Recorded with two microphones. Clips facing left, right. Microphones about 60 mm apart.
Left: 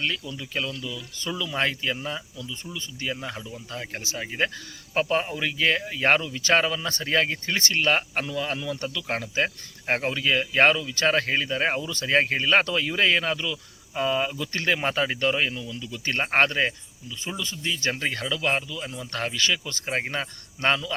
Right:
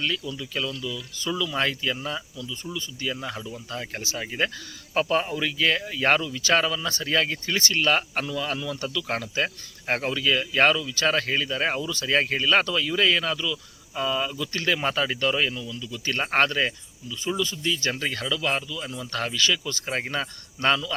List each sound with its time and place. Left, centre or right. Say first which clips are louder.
0.0 s speech: right 1 dB; left
3.2 s speech: right 1 dB; centre